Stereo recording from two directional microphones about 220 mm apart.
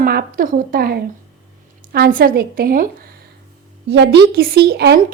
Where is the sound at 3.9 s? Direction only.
50° right (ahead or behind).